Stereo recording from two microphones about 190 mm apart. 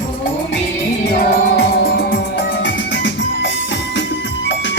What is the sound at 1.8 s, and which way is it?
Music, 60° left (ahead or behind).